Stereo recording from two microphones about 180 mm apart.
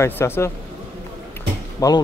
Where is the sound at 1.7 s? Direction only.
20° left (ahead or behind).